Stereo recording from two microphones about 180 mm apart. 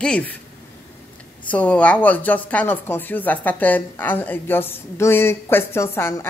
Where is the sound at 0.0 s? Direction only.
5° left (ahead or behind).